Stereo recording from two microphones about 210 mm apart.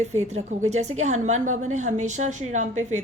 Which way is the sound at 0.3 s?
30° right (ahead or behind).